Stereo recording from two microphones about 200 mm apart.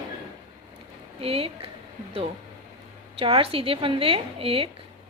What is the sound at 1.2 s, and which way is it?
Speech, 30° right (ahead or behind).